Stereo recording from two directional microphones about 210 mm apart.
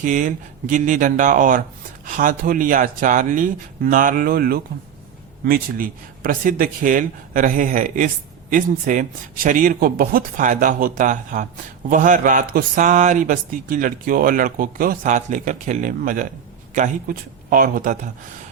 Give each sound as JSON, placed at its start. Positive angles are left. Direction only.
{"t": 0.0, "sound": "speech", "side_deg": -40}